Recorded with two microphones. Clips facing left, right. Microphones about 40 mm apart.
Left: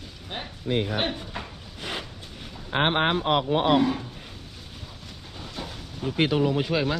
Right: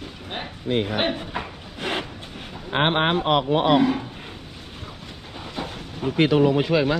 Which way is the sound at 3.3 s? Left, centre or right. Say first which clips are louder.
Right 4 dB; right.